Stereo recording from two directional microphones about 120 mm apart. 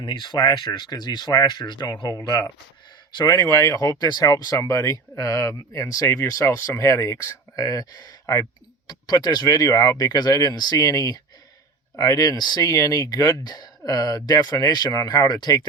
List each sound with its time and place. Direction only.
0.0 s speech: 40° left (ahead or behind)